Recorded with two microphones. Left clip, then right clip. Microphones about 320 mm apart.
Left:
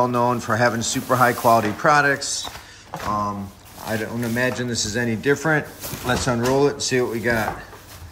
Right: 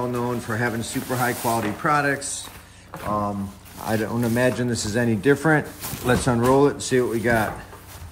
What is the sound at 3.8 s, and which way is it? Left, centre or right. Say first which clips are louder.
Speech: right 2 dB; centre.